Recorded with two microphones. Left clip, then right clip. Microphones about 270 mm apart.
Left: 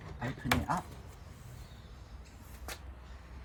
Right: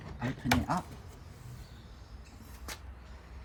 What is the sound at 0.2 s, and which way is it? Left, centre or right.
Speech, centre.